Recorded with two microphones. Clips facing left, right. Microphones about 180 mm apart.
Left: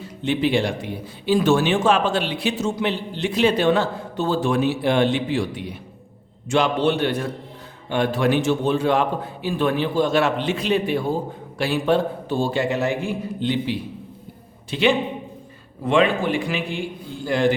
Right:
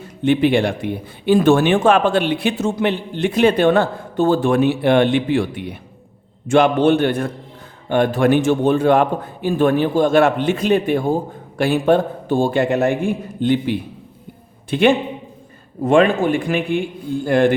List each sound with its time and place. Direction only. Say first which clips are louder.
0.0 s a man's voice: right 6 dB; 55° right (ahead or behind)